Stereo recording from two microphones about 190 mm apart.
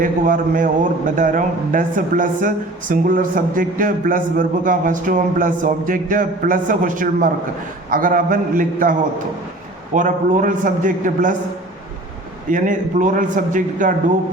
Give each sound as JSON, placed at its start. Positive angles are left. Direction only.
{"t": 0.0, "sound": "a man's voice", "side_deg": -45}
{"t": 12.5, "sound": "a man's voice", "side_deg": -45}